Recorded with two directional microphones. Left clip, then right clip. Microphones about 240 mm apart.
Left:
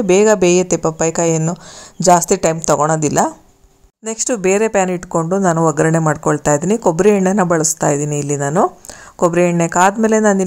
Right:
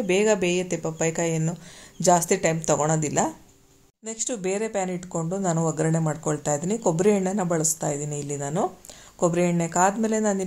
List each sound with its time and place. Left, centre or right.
0.0 s speech: left